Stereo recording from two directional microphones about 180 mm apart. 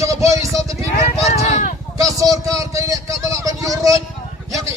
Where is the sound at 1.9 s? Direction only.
20° right (ahead or behind).